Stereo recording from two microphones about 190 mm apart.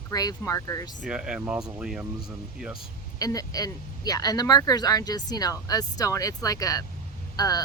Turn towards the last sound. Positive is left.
turn(degrees=20)  # may be behind; listen again after turning